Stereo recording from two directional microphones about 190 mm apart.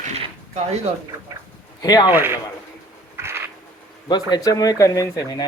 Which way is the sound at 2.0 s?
10° right (ahead or behind).